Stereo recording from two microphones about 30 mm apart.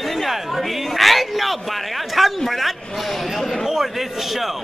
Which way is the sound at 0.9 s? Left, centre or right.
Centre.